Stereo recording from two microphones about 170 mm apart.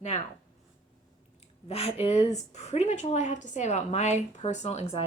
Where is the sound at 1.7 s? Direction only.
35° left (ahead or behind).